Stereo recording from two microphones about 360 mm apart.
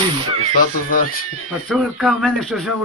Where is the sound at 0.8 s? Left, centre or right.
Left.